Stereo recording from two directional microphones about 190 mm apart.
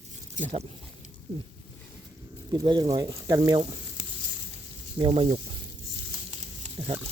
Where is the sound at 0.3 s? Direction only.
40° right (ahead or behind).